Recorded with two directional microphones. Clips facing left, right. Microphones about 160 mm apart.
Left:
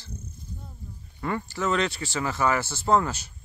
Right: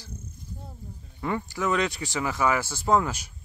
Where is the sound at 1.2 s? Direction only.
15° right (ahead or behind).